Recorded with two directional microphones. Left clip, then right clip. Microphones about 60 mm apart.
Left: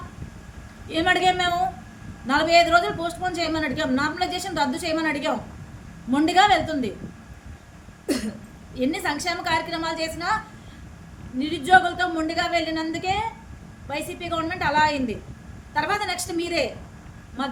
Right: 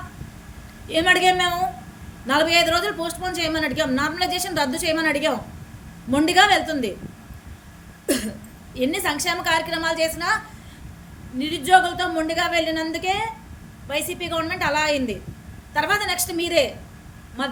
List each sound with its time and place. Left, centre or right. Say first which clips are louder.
0.9 s a woman's voice: right 3 dB; left
8.0 s a sound: right 3 dB; centre
8.7 s a woman's voice: right 2 dB; left